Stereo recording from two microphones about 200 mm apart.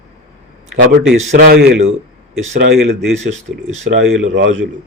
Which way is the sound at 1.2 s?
45° right (ahead or behind).